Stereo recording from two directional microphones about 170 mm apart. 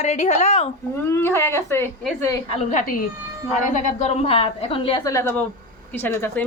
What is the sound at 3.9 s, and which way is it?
A woman's voice, 40° left (ahead or behind).